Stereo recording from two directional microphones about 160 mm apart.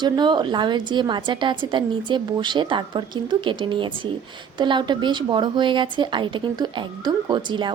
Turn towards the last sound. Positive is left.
turn(degrees=-30)  # may be behind; listen again after turning